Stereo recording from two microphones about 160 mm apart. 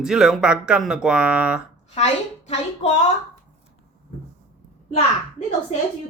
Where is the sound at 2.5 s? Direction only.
45° left (ahead or behind).